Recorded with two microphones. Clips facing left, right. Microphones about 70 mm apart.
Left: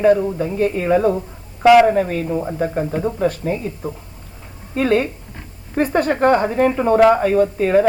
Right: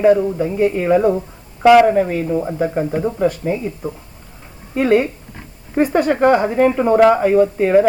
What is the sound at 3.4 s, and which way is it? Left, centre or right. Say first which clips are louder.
Speech: right 2 dB; right.